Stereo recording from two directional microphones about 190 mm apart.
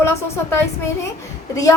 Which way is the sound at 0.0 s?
15° left (ahead or behind).